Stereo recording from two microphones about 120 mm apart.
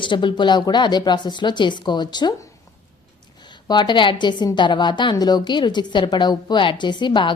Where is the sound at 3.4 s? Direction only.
40° left (ahead or behind).